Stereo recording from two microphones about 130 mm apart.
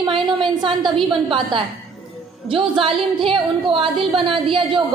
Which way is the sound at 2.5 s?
45° right (ahead or behind).